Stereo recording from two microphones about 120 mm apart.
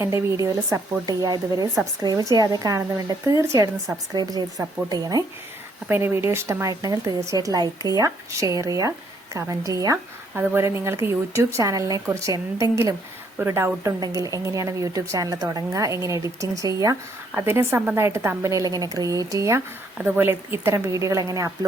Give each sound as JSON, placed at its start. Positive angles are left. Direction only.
{"t": 0.0, "sound": "a woman's voice", "side_deg": -25}
{"t": 5.9, "sound": "a woman's voice", "side_deg": -20}
{"t": 17.3, "sound": "a woman's voice", "side_deg": -20}